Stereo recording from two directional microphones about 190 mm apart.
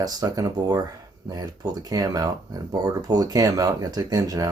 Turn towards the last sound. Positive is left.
turn(degrees=-20)  # may be behind; listen again after turning